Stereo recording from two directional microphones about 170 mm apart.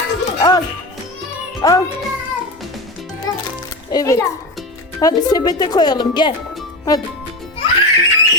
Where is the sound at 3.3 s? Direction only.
20° left (ahead or behind).